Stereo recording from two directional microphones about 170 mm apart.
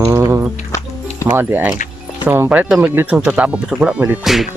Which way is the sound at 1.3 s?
10° right (ahead or behind).